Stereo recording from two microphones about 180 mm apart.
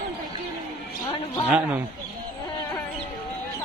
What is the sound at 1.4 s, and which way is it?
Speech, 10° right (ahead or behind).